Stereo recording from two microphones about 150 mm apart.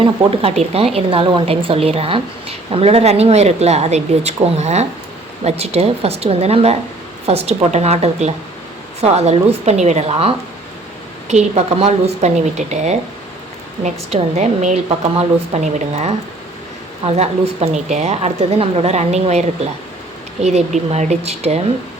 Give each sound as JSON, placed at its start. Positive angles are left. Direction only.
{"t": 0.0, "sound": "a woman's voice", "side_deg": -40}